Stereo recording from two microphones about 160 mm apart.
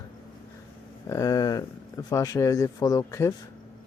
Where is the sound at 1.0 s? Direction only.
20° left (ahead or behind).